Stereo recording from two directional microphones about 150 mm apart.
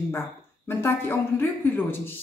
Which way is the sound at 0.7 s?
15° left (ahead or behind).